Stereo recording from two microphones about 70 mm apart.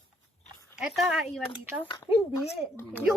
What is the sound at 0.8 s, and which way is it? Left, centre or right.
Speech, centre.